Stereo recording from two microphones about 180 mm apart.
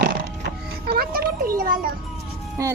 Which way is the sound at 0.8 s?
60° right (ahead or behind).